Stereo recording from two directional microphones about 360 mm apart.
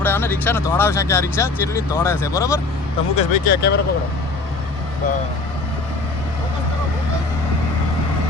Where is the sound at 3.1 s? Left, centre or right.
Left.